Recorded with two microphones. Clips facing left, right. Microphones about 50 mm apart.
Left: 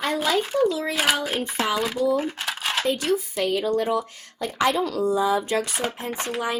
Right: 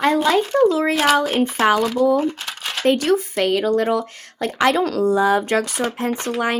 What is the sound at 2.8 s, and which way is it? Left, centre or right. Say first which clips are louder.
Speech: right 8 dB; right.